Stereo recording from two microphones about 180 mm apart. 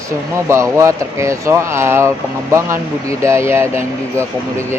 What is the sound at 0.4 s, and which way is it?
Speech, 15° right (ahead or behind).